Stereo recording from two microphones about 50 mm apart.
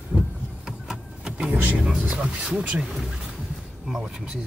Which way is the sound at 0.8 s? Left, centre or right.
Centre.